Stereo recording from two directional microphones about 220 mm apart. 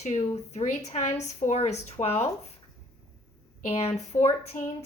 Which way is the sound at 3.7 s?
30° left (ahead or behind).